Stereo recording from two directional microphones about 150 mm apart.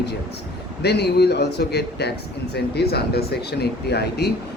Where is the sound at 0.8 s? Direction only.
90° left.